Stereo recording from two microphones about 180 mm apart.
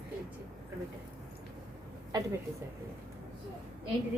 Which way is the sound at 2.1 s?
20° right (ahead or behind).